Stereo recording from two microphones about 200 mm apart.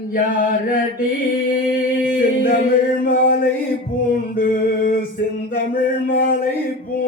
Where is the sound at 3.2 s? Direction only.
45° left (ahead or behind).